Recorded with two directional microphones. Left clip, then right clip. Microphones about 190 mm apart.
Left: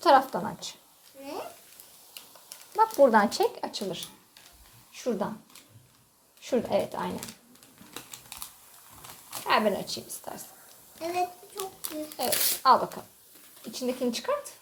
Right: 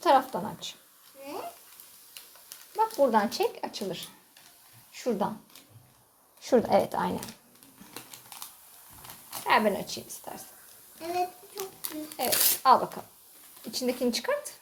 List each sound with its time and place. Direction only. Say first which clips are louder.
0.0 s speech: left 2 dB; 10° left (ahead or behind)
3.0 s speech: left 4 dB; 15° left (ahead or behind)
4.9 s speech: right 1 dB; 10° right (ahead or behind)
6.4 s speech: right 4 dB; 25° right (ahead or behind)
7.9 s typing: left 2 dB; centre (ahead or behind)
9.3 s a woman's voice: right 1 dB; 5° right (ahead or behind)
13.7 s speech: right 1 dB; 15° right (ahead or behind)